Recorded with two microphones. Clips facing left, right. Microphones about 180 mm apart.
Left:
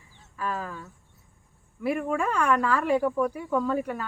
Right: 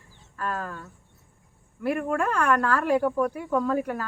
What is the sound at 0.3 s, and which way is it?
Speech, centre (ahead or behind).